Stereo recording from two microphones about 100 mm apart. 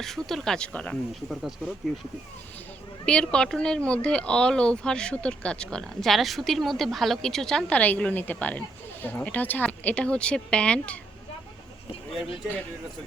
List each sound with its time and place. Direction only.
0.0 s speech: 5° left (ahead or behind)
1.3 s speech: centre (ahead or behind)
3.1 s speech: 10° left (ahead or behind)